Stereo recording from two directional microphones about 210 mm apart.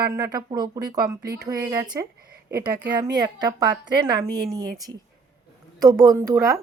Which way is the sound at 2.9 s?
20° right (ahead or behind).